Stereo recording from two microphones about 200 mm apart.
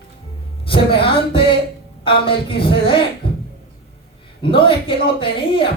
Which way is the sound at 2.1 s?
25° left (ahead or behind).